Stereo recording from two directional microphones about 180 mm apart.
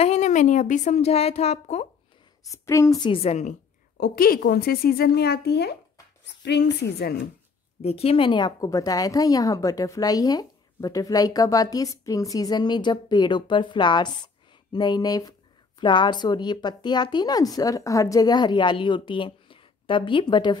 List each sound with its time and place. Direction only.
0.0 s speech: 40° left (ahead or behind)
2.5 s a woman's voice: 15° left (ahead or behind)
3.1 s speech: 35° left (ahead or behind)
4.0 s speech: 55° left (ahead or behind)
7.8 s a woman's voice: 35° left (ahead or behind)